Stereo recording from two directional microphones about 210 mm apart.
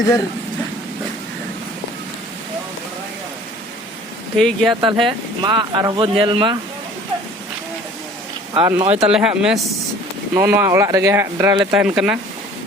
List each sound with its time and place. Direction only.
4.4 s speech: 5° left (ahead or behind)
4.7 s speech: 20° right (ahead or behind)
8.5 s speech: 25° right (ahead or behind)
9.0 s speech: 5° right (ahead or behind)